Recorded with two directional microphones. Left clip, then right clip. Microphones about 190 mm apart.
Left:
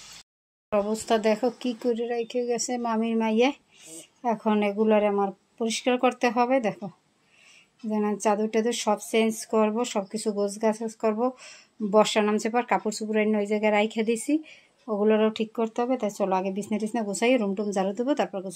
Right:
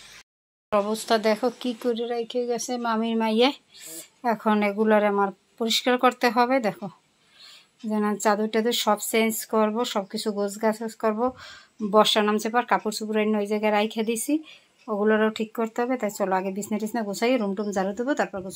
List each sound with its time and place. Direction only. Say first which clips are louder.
0.7 s speech: right 2 dB; centre (ahead or behind)
2.0 s speech: right 1 dB; 30° right (ahead or behind)
2.9 s a woman's voice: right 2 dB; 5° left (ahead or behind)
7.9 s speech: right 2 dB; centre (ahead or behind)